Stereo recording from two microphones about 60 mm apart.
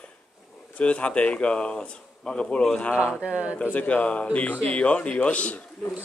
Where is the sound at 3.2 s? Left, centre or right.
Centre.